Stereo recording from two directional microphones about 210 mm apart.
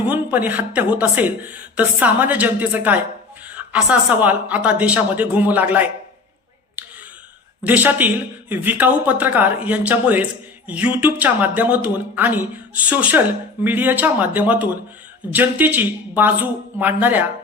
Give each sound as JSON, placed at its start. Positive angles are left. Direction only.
{"t": 0.1, "sound": "a woman's voice", "side_deg": -10}
{"t": 6.8, "sound": "clicking", "side_deg": -5}
{"t": 7.6, "sound": "a woman's voice", "side_deg": -10}